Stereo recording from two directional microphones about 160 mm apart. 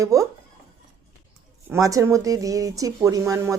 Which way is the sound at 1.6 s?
20° right (ahead or behind).